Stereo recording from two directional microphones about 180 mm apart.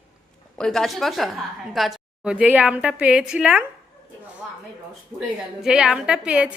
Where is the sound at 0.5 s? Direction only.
5° left (ahead or behind).